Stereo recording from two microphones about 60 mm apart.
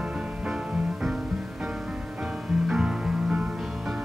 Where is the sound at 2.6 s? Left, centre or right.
Centre.